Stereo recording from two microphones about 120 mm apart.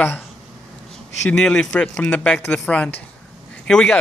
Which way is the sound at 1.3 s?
5° left (ahead or behind).